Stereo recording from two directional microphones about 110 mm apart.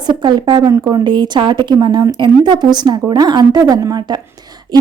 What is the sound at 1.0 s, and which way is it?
A woman's voice, 40° right (ahead or behind).